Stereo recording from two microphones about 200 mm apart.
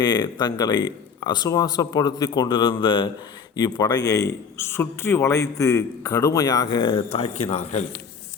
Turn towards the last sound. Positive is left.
turn(degrees=30)  # may be behind; listen again after turning